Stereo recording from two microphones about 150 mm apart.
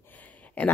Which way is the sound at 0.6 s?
10° left (ahead or behind).